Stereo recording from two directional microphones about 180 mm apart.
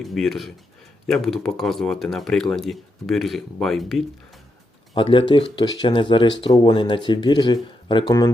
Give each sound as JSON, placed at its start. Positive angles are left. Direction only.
{"t": 0.0, "sound": "speech", "side_deg": 0}
{"t": 4.9, "sound": "speech", "side_deg": 30}